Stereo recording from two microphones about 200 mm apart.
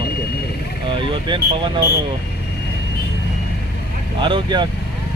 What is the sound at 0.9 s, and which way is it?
Speech, 25° right (ahead or behind).